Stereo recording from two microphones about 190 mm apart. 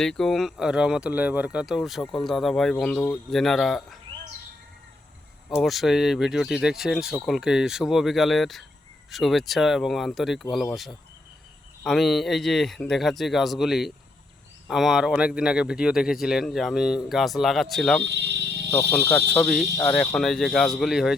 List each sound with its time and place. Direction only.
0.0 s speech: centre (ahead or behind)
5.5 s speech: centre (ahead or behind)
18.0 s a sound: 65° right (ahead or behind)
19.3 s speech: 5° left (ahead or behind)